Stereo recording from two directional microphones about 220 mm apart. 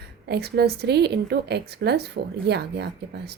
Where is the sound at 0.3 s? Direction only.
45° right (ahead or behind).